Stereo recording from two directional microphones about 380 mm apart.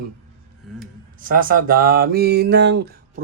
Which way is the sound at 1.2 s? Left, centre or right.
Right.